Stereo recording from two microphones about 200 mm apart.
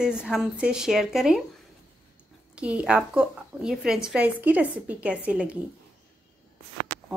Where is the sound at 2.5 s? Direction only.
5° right (ahead or behind).